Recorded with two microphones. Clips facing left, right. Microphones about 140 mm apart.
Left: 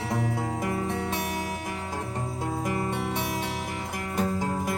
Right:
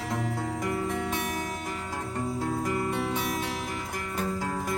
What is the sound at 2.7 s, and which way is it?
Music, 25° left (ahead or behind).